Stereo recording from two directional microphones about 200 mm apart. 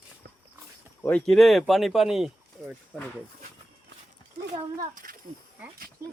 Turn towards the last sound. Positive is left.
turn(degrees=-40)  # may be behind; listen again after turning